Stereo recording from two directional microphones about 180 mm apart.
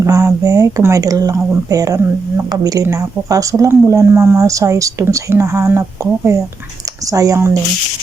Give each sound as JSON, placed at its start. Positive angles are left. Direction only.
{"t": 0.0, "sound": "speech", "side_deg": -15}